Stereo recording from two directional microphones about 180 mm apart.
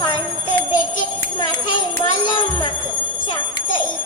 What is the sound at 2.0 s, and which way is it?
Jingle bell, 25° left (ahead or behind).